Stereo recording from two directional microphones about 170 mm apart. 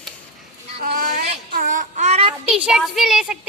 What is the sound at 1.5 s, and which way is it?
Child singing, 50° right (ahead or behind).